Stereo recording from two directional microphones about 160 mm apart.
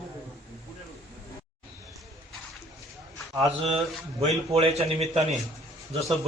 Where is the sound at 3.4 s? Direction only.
40° right (ahead or behind).